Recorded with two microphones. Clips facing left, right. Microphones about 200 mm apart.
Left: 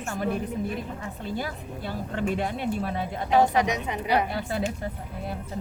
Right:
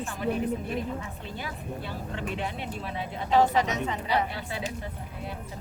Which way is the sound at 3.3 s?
15° left (ahead or behind).